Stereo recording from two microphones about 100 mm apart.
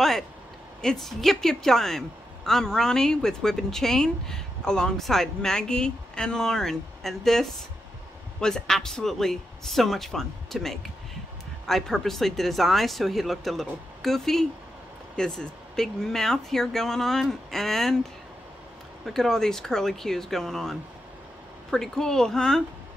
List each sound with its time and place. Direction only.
0.8 s a woman's voice: 5° left (ahead or behind)
19.0 s a woman's voice: 5° left (ahead or behind)